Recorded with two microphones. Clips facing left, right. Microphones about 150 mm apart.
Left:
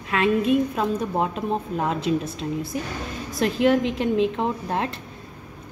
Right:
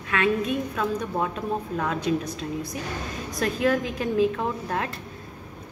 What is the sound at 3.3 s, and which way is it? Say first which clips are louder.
A woman's voice: left 4 dB; 25° left (ahead or behind).